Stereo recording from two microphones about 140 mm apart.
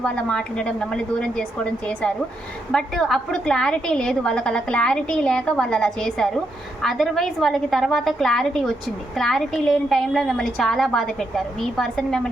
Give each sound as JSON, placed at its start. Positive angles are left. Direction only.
{"t": 0.0, "sound": "a woman's voice", "side_deg": 5}